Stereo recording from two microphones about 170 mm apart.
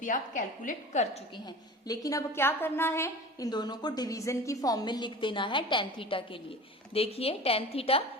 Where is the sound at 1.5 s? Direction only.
20° left (ahead or behind).